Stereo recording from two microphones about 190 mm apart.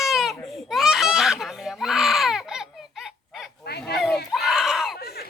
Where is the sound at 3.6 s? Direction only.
55° left (ahead or behind).